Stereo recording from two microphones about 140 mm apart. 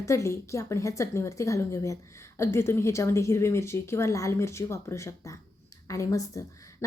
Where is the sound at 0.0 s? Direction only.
20° left (ahead or behind).